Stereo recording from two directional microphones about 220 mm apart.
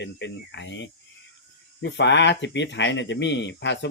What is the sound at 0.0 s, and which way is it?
Speech, 55° left (ahead or behind).